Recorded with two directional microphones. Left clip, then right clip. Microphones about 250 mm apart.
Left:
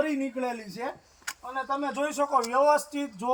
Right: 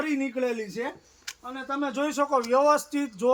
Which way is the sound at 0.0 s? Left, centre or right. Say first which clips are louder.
Right 1 dB; centre.